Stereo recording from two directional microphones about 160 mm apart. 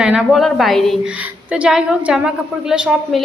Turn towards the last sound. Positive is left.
turn(degrees=-5)  # may be behind; listen again after turning